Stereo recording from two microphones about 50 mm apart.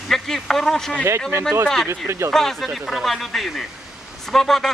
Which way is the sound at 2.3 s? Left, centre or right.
Centre.